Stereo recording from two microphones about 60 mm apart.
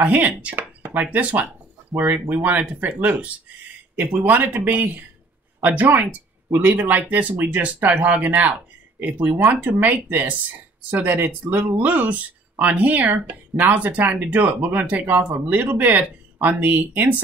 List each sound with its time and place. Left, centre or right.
0.0 s speech: right
0.6 s a sound: right
1.1 s speech: right